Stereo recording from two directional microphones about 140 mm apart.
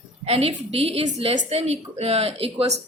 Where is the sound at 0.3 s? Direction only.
45° right (ahead or behind).